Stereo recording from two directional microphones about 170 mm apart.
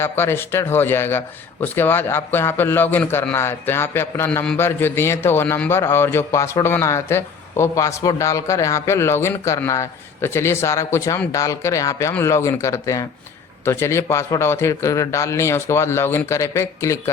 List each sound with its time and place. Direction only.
0.0 s a man's voice: 15° left (ahead or behind)